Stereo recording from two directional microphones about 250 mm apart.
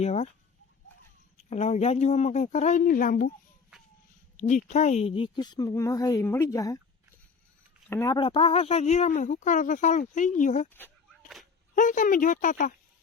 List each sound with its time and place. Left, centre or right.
0.0 s speech: left
1.5 s speech: left
3.7 s a sound: centre
4.4 s a woman's voice: left; by 6.7 s centre
7.9 s speech: centre; by 10.7 s left
11.7 s speech: left